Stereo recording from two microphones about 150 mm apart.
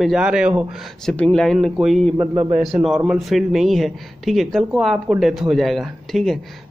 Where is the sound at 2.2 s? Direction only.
35° right (ahead or behind).